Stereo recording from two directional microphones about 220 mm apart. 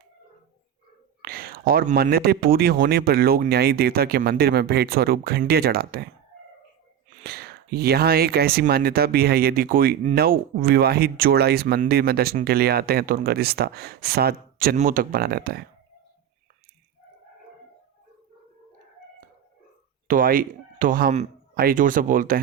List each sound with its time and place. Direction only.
1.2 s speech: 40° right (ahead or behind)
7.3 s speech: 45° right (ahead or behind)
20.1 s speech: 40° right (ahead or behind)